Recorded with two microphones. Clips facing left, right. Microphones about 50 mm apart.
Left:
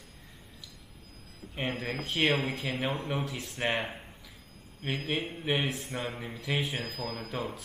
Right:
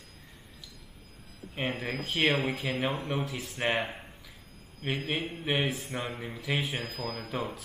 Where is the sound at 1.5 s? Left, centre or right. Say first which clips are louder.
Right 1 dB; centre.